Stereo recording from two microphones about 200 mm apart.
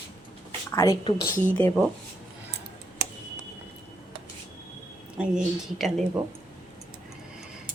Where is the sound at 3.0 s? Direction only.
55° right (ahead or behind).